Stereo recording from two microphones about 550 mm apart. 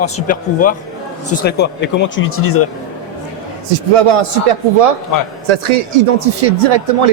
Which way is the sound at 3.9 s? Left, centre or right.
Right.